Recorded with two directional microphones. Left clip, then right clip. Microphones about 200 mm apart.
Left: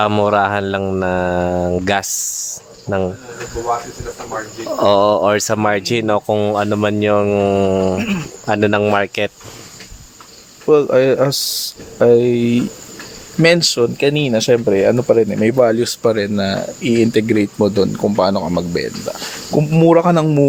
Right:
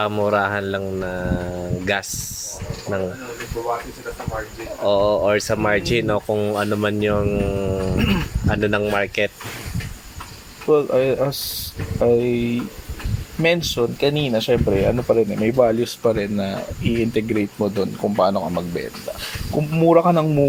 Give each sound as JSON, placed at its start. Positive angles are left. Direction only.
{"t": 0.0, "sound": "speech", "side_deg": 40}
{"t": 4.8, "sound": "speech", "side_deg": 40}
{"t": 6.5, "sound": "speech", "side_deg": 30}
{"t": 8.0, "sound": "speech", "side_deg": 30}
{"t": 10.7, "sound": "speech", "side_deg": 55}